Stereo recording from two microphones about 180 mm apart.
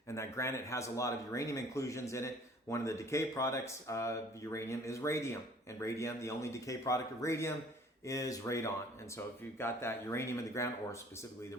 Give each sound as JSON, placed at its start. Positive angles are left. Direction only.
{"t": 0.1, "sound": "speech", "side_deg": 15}